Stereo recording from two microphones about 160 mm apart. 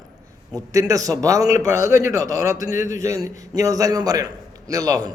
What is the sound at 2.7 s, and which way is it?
Speech, 55° left (ahead or behind).